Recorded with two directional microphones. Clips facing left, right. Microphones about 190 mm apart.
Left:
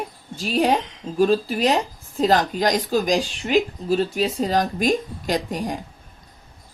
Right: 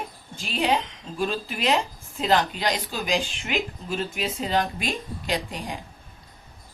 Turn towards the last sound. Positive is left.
turn(degrees=45)  # may be behind; listen again after turning